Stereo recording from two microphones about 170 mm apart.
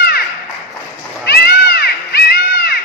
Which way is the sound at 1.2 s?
70° left (ahead or behind).